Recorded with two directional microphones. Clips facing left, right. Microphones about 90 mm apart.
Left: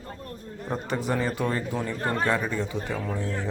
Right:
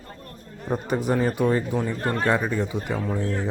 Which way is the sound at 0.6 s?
15° right (ahead or behind).